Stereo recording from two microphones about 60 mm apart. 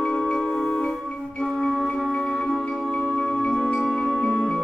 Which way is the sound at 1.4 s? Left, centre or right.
Centre.